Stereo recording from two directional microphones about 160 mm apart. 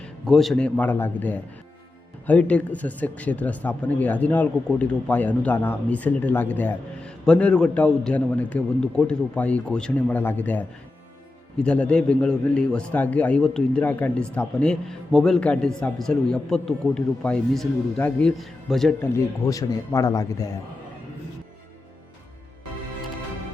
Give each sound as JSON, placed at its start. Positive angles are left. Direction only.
{"t": 0.0, "sound": "a man's voice", "side_deg": 0}
{"t": 18.9, "sound": "speech", "side_deg": 20}